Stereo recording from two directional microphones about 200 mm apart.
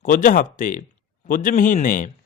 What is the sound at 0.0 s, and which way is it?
Speech, 40° left (ahead or behind).